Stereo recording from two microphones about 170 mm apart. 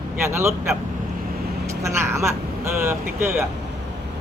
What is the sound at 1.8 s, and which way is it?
Speech, 15° right (ahead or behind).